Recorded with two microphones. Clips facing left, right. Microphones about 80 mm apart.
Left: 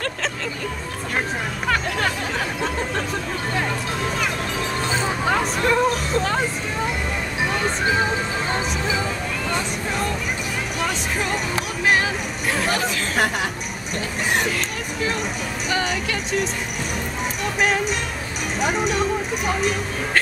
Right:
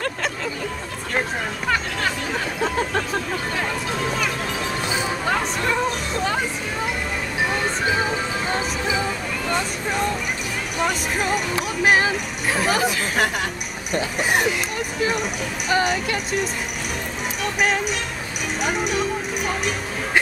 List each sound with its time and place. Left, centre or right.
5.2 s music: centre
10.8 s speech: centre
15.7 s speech: centre